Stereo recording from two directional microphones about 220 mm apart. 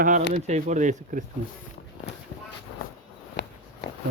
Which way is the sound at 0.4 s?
30° right (ahead or behind).